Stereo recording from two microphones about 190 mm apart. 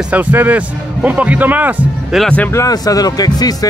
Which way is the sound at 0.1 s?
10° right (ahead or behind).